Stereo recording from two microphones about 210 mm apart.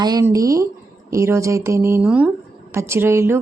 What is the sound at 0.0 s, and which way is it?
Speech, 15° right (ahead or behind).